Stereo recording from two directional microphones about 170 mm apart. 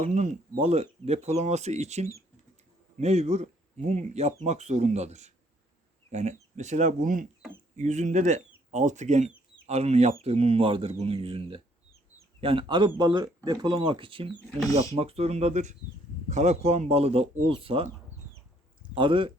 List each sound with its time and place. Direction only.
0.0 s speech: 45° right (ahead or behind)
18.9 s speech: 30° right (ahead or behind)